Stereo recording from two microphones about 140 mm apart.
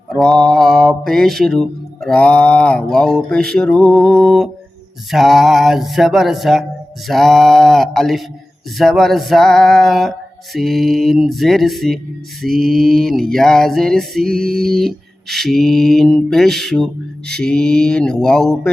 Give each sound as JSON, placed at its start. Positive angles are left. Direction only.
{"t": 0.1, "sound": "mantra", "side_deg": 0}